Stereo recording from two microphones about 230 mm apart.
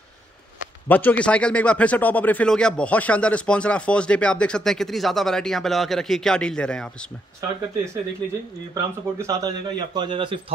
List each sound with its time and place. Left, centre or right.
0.8 s a man's voice: centre
7.3 s speech: centre
9.2 s a man's voice: centre